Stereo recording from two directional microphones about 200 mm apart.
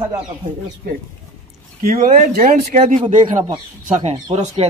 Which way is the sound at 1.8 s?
40° right (ahead or behind).